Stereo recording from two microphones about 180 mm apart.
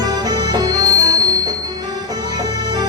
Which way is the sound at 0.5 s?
20° right (ahead or behind).